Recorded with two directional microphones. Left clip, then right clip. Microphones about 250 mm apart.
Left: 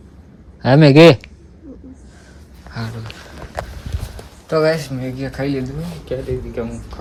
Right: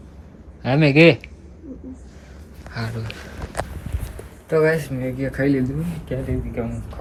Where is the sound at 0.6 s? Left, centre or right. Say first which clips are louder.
Left 6 dB; left.